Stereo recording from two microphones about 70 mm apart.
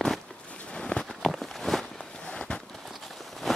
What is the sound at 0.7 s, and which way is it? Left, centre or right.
Walk, centre.